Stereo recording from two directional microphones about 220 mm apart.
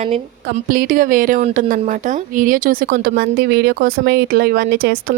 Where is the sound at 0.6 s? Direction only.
40° right (ahead or behind).